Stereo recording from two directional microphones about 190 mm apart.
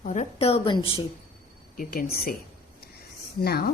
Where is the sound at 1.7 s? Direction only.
50° left (ahead or behind).